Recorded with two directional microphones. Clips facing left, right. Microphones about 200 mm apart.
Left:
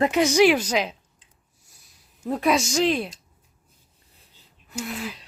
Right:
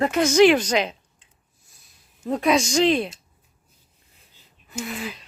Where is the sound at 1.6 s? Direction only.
10° left (ahead or behind).